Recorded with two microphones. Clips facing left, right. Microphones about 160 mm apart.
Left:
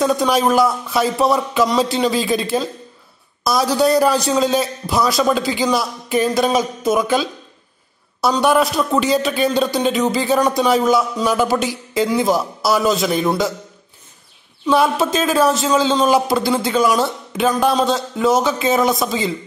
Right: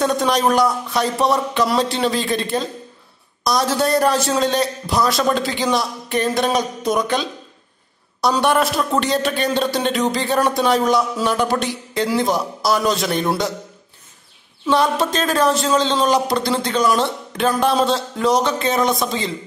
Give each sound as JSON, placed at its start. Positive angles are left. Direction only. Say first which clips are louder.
{"t": 0.0, "sound": "a man's voice", "louder": "left 2 dB", "side_deg": 0}
{"t": 14.7, "sound": "a man's voice", "louder": "left 2 dB", "side_deg": 5}